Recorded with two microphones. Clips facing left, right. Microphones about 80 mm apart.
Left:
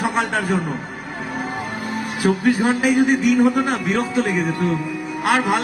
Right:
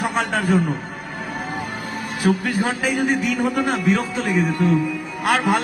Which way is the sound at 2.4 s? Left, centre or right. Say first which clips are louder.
Left 5 dB; centre.